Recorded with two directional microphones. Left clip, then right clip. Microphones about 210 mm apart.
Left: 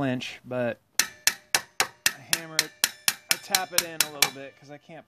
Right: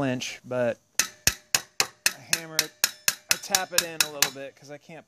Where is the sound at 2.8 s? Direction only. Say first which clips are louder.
Even; 5° right (ahead or behind).